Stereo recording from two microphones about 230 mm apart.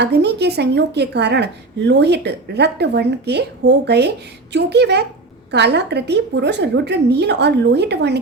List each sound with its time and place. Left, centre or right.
0.0 s a woman's voice: right